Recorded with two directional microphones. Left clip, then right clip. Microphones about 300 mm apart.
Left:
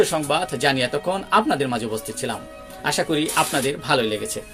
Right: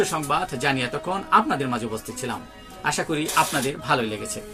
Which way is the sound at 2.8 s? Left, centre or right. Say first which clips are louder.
Left 3 dB; centre.